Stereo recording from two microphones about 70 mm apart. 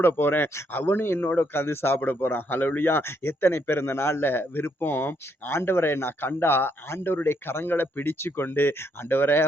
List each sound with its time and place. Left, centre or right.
0.0 s speech: left